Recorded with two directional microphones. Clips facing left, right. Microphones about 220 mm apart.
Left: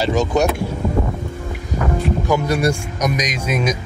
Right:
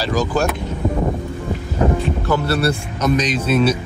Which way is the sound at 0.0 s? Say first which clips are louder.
Left 2 dB; 25° left (ahead or behind).